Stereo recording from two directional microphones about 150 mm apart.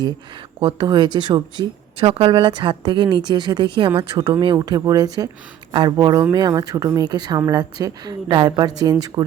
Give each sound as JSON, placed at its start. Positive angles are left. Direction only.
{"t": 0.6, "sound": "speech", "side_deg": -30}